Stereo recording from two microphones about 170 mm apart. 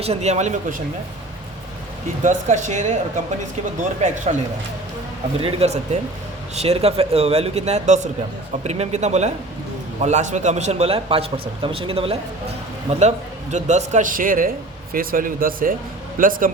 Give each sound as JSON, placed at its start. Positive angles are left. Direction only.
{"t": 0.0, "sound": "a man's voice", "side_deg": -40}
{"t": 2.2, "sound": "a man's voice", "side_deg": -45}
{"t": 5.4, "sound": "a man's voice", "side_deg": -40}